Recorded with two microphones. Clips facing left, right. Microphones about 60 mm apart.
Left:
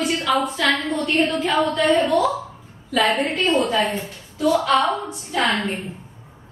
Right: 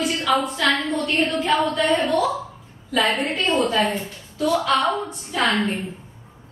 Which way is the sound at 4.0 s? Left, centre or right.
Centre.